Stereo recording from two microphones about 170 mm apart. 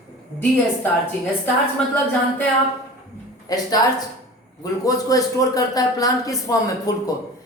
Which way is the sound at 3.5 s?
20° left (ahead or behind).